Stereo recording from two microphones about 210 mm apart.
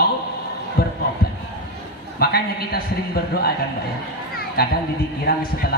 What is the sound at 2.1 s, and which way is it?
Speech, 50° left (ahead or behind).